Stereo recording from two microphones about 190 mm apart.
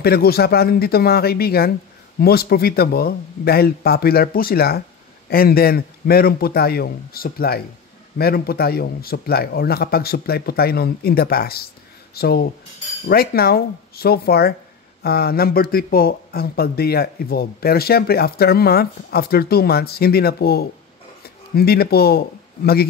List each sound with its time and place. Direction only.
0.0 s speech: 55° left (ahead or behind)